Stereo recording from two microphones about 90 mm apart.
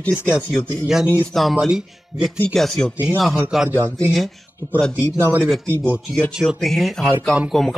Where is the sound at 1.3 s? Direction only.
Centre (ahead or behind).